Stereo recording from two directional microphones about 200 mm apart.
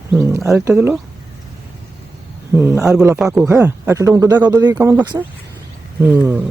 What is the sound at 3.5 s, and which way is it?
Speech, 15° right (ahead or behind).